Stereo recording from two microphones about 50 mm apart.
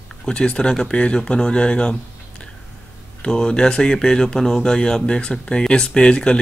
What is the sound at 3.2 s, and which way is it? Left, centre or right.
Speech, centre.